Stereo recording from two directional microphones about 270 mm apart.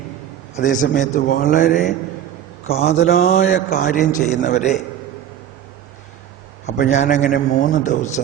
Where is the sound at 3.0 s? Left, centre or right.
Left.